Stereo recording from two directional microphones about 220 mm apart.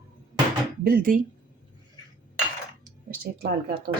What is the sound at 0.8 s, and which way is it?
Speech, 40° right (ahead or behind).